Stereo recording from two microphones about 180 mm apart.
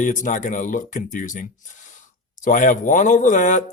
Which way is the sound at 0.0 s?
45° left (ahead or behind).